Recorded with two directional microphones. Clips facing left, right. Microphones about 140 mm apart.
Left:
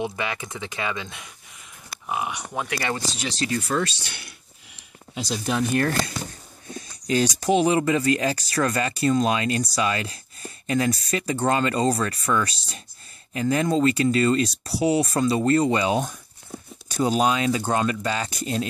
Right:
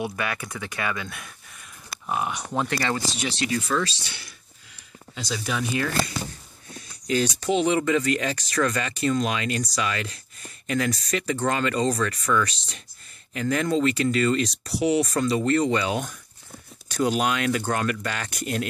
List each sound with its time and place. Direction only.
0.0 s speech: 25° left (ahead or behind)
3.3 s speech: 40° left (ahead or behind)
3.8 s speech: 60° left (ahead or behind)
5.3 s speech: 50° left (ahead or behind)
7.1 s speech: 40° left (ahead or behind)
7.9 s speech: 30° left (ahead or behind)